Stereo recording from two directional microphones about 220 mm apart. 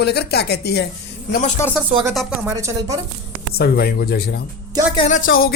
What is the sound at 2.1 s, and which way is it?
Speech, centre (ahead or behind).